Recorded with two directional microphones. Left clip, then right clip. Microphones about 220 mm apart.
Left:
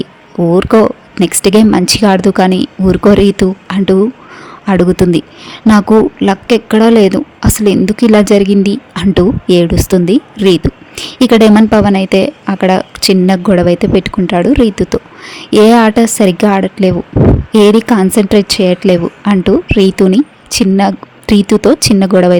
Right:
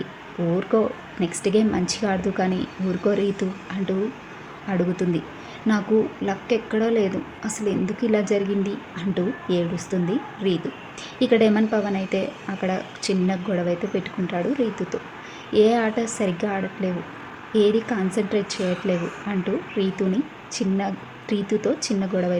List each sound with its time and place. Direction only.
0.5 s a woman's voice: 50° left (ahead or behind)